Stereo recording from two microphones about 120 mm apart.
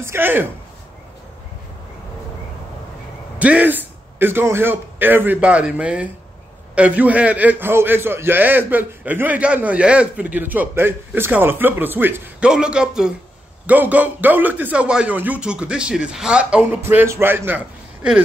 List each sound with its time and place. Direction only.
0.0 s speech: 20° right (ahead or behind)
3.3 s a man's voice: 10° right (ahead or behind)
12.4 s a man's voice: 5° right (ahead or behind)
16.8 s a man's voice: 20° right (ahead or behind)